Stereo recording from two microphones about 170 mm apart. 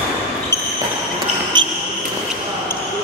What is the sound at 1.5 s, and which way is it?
Basketball bounce, 25° right (ahead or behind).